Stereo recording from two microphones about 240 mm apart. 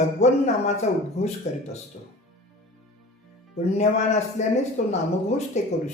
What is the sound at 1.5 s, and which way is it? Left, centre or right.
Speech, left.